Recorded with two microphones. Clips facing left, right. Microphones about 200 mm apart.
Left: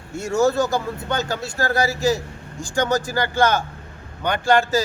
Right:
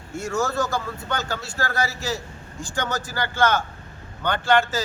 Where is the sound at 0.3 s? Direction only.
25° left (ahead or behind).